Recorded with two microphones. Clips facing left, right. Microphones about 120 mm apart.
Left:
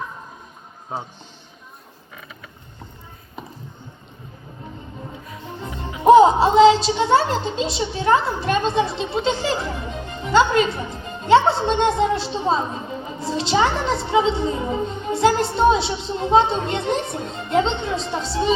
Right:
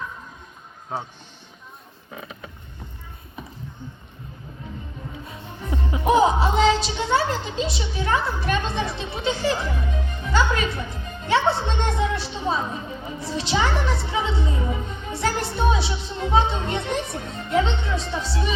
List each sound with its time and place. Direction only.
6.1 s a woman's voice: 30° left (ahead or behind)